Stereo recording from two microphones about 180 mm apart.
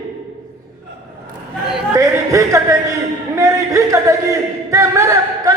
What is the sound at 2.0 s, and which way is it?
A woman's voice, 15° right (ahead or behind).